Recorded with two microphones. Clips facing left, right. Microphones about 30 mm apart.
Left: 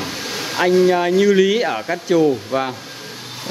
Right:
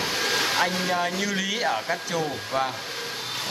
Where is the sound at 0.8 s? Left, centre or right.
Centre.